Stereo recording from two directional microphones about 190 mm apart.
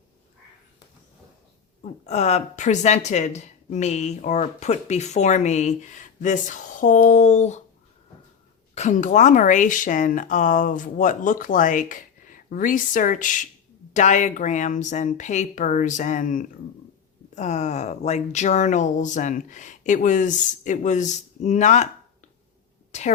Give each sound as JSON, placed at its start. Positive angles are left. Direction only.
{"t": 1.8, "sound": "speech", "side_deg": 35}
{"t": 8.7, "sound": "speech", "side_deg": 40}
{"t": 22.9, "sound": "speech", "side_deg": 35}